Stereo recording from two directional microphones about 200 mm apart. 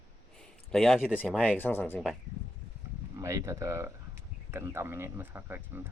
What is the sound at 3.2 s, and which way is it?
Speech, 15° right (ahead or behind).